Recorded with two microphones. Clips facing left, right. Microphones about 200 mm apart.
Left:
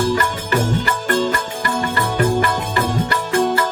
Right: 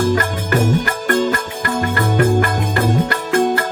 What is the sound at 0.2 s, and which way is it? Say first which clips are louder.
Music: right 2 dB; 50° right (ahead or behind).